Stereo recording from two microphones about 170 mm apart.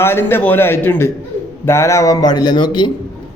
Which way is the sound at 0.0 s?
15° left (ahead or behind).